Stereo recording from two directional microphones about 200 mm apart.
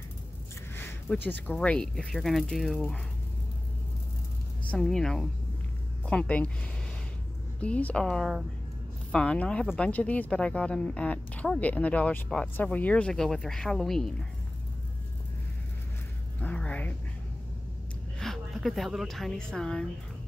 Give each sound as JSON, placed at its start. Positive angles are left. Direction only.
{"t": 0.7, "sound": "a sound", "side_deg": 10}
{"t": 1.5, "sound": "speech", "side_deg": 5}
{"t": 4.6, "sound": "speech", "side_deg": 0}
{"t": 7.6, "sound": "speech", "side_deg": 5}
{"t": 16.3, "sound": "speech", "side_deg": 5}
{"t": 18.2, "sound": "a woman's voice", "side_deg": 0}